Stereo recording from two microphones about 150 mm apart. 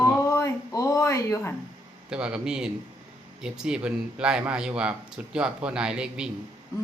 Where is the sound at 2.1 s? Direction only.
5° right (ahead or behind).